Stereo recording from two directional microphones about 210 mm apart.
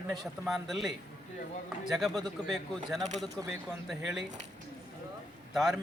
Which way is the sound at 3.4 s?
5° left (ahead or behind).